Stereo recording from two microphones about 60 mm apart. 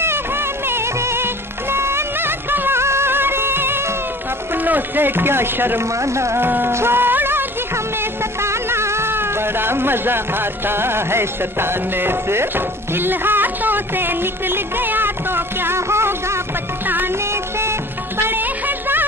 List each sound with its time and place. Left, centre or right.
0.7 s music: right
4.6 s speech: right
5.9 s music: right
6.4 s music: right
16.8 s music: right
17.3 s music: right